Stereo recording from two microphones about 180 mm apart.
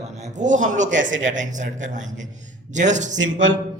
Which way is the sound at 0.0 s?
40° right (ahead or behind).